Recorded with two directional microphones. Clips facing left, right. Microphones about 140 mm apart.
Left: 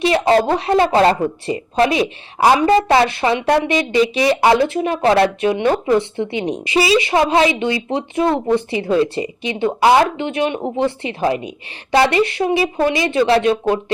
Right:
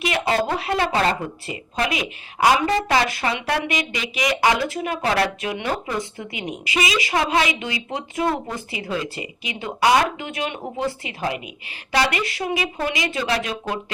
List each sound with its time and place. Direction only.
0.0 s a sound: 35° left (ahead or behind)
0.4 s speech: 30° left (ahead or behind)
8.3 s a woman's voice: 75° left (ahead or behind)
8.7 s a woman's voice: 30° left (ahead or behind)